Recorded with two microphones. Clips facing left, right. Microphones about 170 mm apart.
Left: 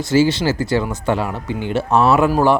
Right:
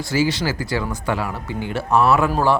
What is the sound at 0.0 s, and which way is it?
Speech, 25° left (ahead or behind).